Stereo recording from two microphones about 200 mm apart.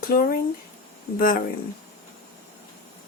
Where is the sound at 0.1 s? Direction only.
45° left (ahead or behind).